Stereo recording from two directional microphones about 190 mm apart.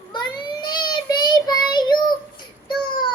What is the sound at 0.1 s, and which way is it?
Child singing, 20° left (ahead or behind).